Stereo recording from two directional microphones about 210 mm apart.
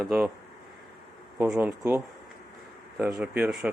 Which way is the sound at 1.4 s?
10° right (ahead or behind).